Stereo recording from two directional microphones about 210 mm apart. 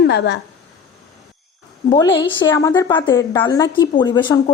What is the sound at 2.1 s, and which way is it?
A woman's voice, 25° left (ahead or behind).